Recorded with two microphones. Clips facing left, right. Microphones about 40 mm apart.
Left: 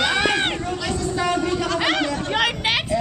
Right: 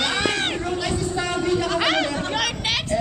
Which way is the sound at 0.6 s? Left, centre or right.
Centre.